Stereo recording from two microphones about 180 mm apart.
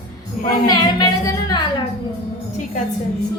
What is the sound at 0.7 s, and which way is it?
Speech, 20° left (ahead or behind).